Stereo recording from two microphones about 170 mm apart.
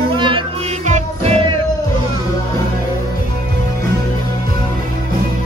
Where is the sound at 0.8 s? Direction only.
40° right (ahead or behind).